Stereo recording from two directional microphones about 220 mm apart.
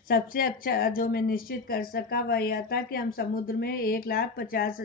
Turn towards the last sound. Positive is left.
turn(degrees=40)  # may be behind; listen again after turning